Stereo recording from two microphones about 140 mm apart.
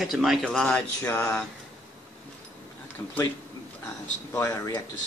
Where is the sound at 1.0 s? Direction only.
15° left (ahead or behind).